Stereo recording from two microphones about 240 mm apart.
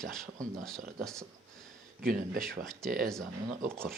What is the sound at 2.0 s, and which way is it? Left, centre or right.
Speech, right.